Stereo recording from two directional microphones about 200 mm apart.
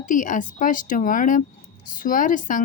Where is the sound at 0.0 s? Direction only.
40° left (ahead or behind).